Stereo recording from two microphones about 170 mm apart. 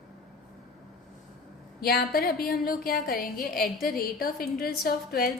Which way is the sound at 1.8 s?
60° left (ahead or behind).